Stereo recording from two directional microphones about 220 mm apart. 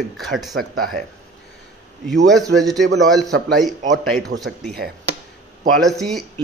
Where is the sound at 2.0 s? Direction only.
Centre (ahead or behind).